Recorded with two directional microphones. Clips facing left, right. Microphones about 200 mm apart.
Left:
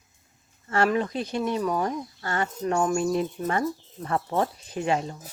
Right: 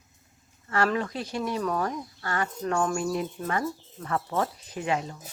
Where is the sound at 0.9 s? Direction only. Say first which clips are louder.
Left 3 dB; 20° left (ahead or behind).